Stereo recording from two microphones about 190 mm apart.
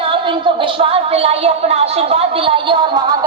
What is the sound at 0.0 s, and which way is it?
A woman's voice, 25° right (ahead or behind).